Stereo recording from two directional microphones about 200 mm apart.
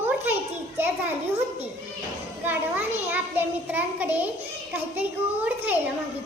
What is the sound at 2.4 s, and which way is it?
A child's voice, 10° right (ahead or behind).